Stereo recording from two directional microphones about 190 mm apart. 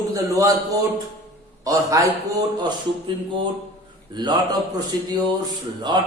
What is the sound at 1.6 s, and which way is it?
Speech, 15° right (ahead or behind).